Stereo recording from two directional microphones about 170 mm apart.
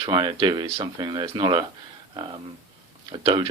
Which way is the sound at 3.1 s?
30° right (ahead or behind).